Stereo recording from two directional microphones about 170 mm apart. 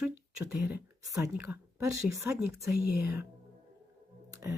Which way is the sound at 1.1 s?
20° right (ahead or behind).